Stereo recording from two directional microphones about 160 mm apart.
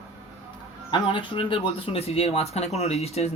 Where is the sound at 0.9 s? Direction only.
30° left (ahead or behind).